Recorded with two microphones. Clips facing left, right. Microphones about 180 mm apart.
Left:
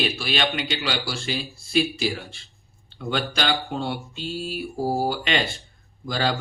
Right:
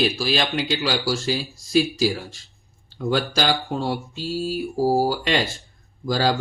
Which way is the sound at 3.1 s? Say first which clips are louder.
Right 3 dB; 40° right (ahead or behind).